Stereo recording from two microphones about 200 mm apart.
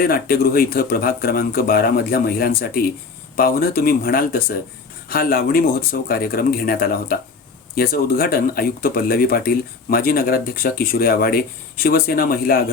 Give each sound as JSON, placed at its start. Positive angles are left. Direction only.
{"t": 0.0, "sound": "speech", "side_deg": 50}